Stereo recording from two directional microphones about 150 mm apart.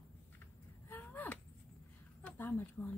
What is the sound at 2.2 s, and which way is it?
Speech, 10° left (ahead or behind).